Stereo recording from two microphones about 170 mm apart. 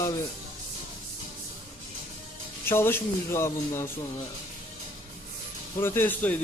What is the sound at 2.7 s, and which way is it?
A man's voice, 15° left (ahead or behind).